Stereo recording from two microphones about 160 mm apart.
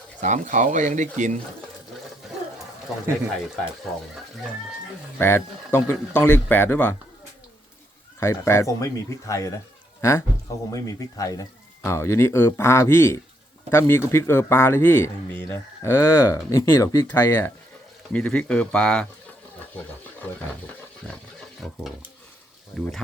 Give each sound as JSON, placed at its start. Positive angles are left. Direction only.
{"t": 0.2, "sound": "speech", "side_deg": -50}
{"t": 2.9, "sound": "speech", "side_deg": 0}
{"t": 5.1, "sound": "speech", "side_deg": 15}
{"t": 8.2, "sound": "speech", "side_deg": 15}